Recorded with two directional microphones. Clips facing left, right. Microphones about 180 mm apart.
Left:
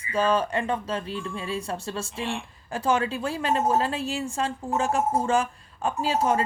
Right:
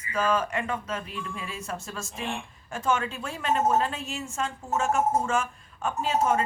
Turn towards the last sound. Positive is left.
turn(degrees=30)  # may be behind; listen again after turning